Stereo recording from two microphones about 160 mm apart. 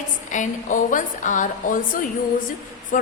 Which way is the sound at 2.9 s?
55° left (ahead or behind).